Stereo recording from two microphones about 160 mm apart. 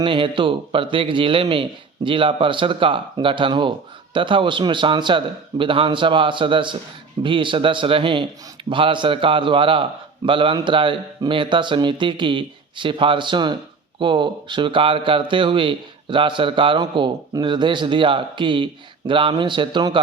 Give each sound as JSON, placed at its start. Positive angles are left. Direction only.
{"t": 0.0, "sound": "speech", "side_deg": -30}